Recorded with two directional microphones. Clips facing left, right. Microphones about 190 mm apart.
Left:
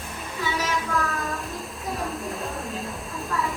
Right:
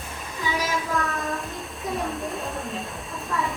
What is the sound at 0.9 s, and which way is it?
Music, centre (ahead or behind).